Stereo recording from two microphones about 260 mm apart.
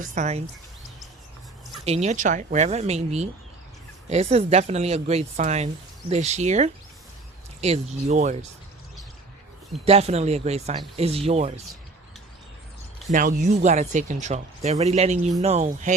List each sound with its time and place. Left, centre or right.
0.0 s speech: right
1.8 s speech: right
9.8 s speech: right
13.1 s speech: right